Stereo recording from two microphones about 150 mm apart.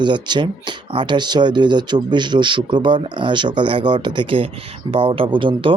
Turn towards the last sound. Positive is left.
turn(degrees=-35)  # may be behind; listen again after turning